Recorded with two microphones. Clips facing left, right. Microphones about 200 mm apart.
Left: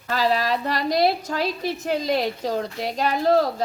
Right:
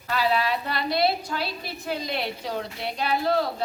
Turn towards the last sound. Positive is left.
turn(degrees=40)  # may be behind; listen again after turning